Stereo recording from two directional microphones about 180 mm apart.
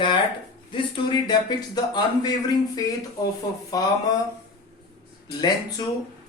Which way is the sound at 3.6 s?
20° left (ahead or behind).